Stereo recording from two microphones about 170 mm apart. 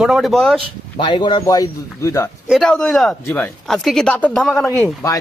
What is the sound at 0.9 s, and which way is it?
A man's voice, 30° left (ahead or behind).